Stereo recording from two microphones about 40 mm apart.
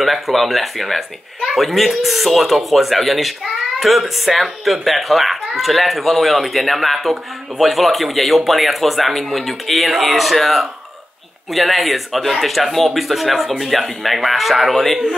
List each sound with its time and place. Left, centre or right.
0.0 s a man's voice: centre